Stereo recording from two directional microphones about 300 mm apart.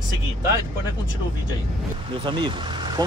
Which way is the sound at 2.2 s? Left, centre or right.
Centre.